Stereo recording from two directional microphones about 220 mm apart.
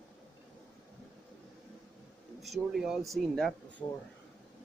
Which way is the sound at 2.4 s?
Centre (ahead or behind).